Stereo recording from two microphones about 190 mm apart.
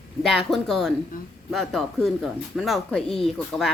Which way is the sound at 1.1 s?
45° left (ahead or behind).